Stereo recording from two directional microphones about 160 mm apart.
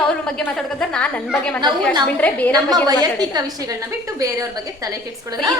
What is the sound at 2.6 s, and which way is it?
A woman's voice, 25° right (ahead or behind).